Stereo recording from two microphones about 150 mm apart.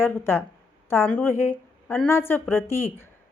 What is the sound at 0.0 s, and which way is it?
A woman's voice, 15° left (ahead or behind).